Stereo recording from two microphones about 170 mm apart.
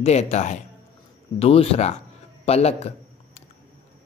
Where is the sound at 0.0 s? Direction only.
40° left (ahead or behind).